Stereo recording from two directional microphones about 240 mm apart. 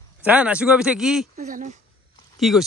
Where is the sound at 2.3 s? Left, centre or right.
Centre.